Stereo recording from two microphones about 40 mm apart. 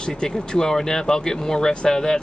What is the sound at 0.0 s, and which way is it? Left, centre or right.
Speech, left.